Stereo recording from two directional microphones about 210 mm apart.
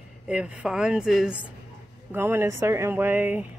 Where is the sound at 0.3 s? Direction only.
5° right (ahead or behind).